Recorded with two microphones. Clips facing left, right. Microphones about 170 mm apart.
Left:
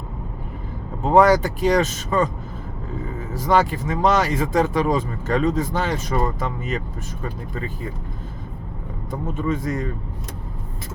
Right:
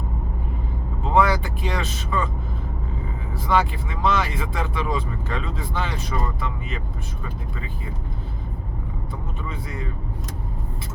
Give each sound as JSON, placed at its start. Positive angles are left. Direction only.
{"t": 1.0, "sound": "speech", "side_deg": 40}
{"t": 3.3, "sound": "speech", "side_deg": 40}
{"t": 9.4, "sound": "a man's voice", "side_deg": 45}